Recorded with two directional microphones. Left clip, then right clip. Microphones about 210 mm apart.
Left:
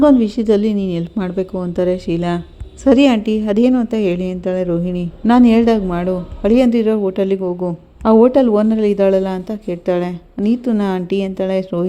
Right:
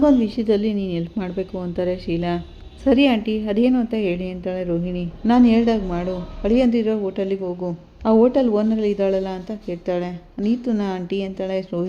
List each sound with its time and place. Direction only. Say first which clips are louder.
0.0 s a woman's voice: left 5 dB; 25° left (ahead or behind)